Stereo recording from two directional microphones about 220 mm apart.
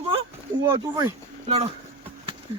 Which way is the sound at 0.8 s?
20° right (ahead or behind).